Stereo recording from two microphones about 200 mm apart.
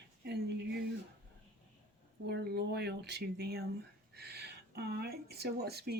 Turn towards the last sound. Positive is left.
turn(degrees=-55)  # may be behind; listen again after turning